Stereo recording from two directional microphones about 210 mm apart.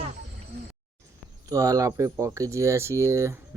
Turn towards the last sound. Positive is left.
turn(degrees=-15)  # may be behind; listen again after turning